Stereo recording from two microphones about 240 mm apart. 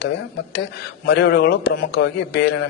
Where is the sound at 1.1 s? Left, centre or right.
Left.